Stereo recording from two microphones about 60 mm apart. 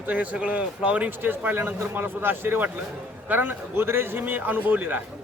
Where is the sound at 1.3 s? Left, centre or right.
Right.